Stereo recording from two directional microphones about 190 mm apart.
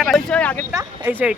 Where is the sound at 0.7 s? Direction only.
15° right (ahead or behind).